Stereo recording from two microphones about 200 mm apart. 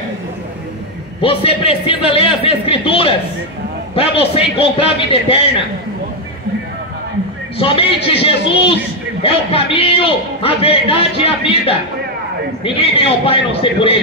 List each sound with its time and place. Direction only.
1.2 s a man's voice: 30° left (ahead or behind)
7.5 s a man's voice: 30° left (ahead or behind)